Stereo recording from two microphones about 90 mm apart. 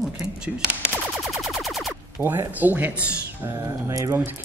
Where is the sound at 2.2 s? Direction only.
30° right (ahead or behind).